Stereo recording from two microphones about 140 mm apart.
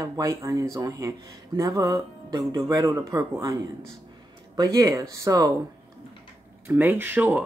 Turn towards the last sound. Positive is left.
turn(degrees=-10)  # may be behind; listen again after turning